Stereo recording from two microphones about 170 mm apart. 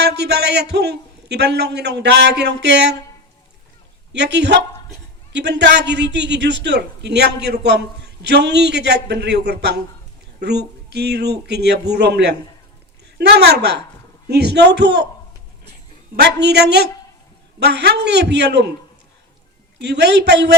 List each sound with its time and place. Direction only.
0.0 s a man's voice: 80° right
4.1 s a man's voice: 90° right
16.2 s a man's voice: 80° right
19.8 s a man's voice: 85° right